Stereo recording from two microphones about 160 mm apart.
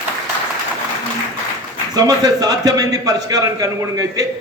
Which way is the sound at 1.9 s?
25° right (ahead or behind).